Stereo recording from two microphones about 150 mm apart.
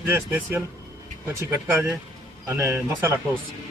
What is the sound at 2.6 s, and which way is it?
Speech, 20° right (ahead or behind).